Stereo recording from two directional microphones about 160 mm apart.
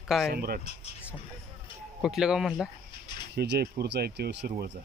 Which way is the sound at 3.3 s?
90° right.